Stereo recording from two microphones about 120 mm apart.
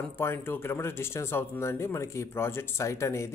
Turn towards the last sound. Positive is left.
turn(degrees=25)  # may be behind; listen again after turning